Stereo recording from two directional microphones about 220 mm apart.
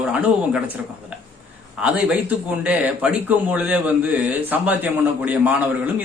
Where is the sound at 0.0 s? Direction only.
5° right (ahead or behind).